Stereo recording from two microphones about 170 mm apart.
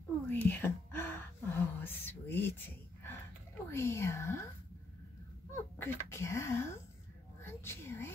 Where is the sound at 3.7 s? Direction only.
15° left (ahead or behind).